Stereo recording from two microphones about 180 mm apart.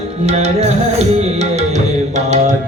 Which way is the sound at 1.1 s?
35° right (ahead or behind).